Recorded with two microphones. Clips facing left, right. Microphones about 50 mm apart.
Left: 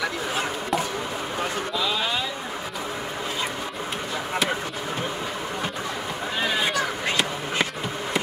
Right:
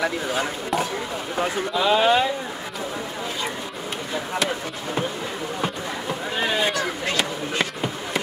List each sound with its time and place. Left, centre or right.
0.4 s speech: centre
1.8 s speech: right
7.1 s a sound: centre